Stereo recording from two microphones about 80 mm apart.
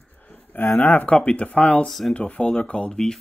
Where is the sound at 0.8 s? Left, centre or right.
Centre.